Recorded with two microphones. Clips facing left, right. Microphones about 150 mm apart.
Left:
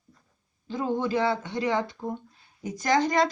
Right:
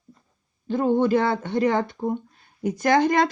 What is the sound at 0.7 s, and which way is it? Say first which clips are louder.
Speech: right 7 dB; 55° right (ahead or behind).